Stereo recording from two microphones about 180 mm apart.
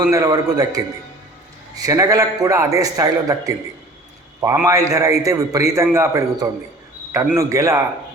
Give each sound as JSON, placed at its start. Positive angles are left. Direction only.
{"t": 0.1, "sound": "a man's voice", "side_deg": -20}
{"t": 1.8, "sound": "a man's voice", "side_deg": -20}